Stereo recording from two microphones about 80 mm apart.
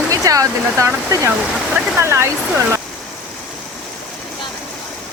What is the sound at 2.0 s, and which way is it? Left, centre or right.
Speech, right.